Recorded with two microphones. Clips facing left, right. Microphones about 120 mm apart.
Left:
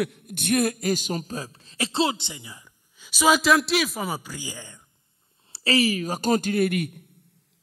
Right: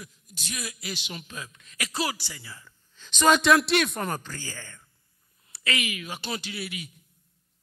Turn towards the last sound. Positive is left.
turn(degrees=55)  # may be behind; listen again after turning